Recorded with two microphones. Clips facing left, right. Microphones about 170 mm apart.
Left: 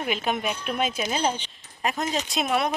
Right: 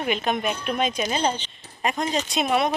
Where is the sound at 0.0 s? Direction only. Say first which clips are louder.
Right 2 dB; 5° left (ahead or behind).